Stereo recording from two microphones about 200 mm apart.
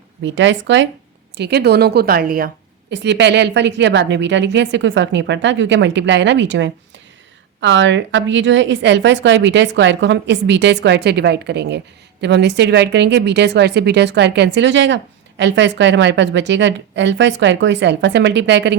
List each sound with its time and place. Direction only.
0.2 s a woman's voice: 65° right (ahead or behind); by 2.5 s 45° right (ahead or behind)
2.9 s speech: 60° right (ahead or behind)